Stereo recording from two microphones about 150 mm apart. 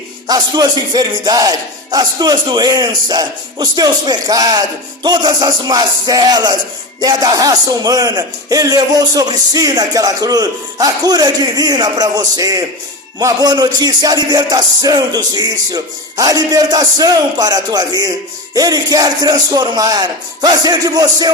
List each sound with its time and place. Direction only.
0.3 s a man's voice: 25° right (ahead or behind)